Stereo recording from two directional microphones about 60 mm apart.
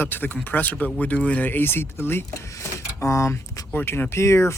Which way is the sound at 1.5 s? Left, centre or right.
Left.